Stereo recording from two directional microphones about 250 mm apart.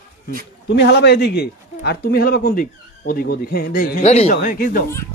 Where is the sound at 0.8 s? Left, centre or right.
Left.